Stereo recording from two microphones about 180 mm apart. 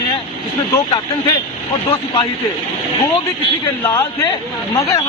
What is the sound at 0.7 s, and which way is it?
Speech, 20° left (ahead or behind).